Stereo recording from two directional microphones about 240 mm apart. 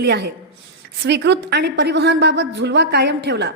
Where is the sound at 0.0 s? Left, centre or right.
Right.